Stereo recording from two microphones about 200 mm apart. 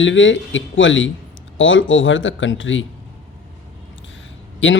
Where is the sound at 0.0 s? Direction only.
70° left (ahead or behind).